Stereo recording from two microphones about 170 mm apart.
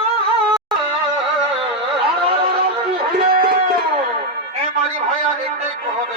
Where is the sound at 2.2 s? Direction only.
30° right (ahead or behind).